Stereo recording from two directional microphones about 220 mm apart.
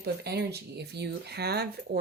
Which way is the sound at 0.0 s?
45° right (ahead or behind).